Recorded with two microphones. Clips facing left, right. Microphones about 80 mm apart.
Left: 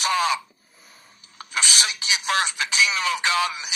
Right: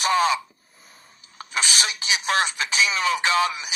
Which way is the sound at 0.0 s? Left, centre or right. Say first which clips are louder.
Right 2 dB; right.